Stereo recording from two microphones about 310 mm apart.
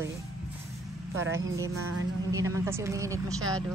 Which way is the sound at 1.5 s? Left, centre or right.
Centre.